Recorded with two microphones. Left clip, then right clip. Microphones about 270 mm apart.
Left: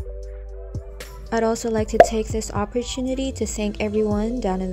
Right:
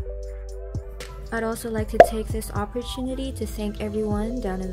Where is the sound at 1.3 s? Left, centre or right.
Centre.